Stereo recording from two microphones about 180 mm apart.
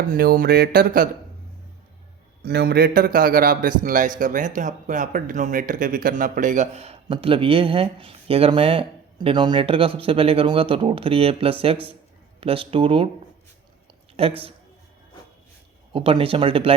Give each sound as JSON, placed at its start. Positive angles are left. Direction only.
{"t": 0.1, "sound": "speech", "side_deg": -50}
{"t": 2.4, "sound": "a man's voice", "side_deg": -60}
{"t": 14.2, "sound": "speech", "side_deg": -30}
{"t": 15.9, "sound": "speech", "side_deg": -30}